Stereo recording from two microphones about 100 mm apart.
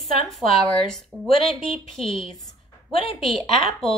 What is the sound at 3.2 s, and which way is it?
Speech, centre (ahead or behind).